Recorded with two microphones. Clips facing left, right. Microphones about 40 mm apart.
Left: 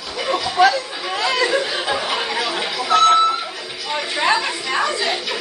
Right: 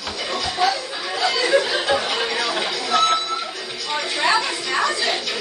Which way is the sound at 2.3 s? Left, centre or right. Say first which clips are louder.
Left 1 dB; centre.